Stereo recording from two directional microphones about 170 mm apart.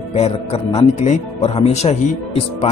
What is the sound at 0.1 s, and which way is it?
Speech, 40° left (ahead or behind).